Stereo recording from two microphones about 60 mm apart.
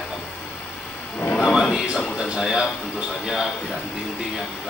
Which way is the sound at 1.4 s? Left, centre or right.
Centre.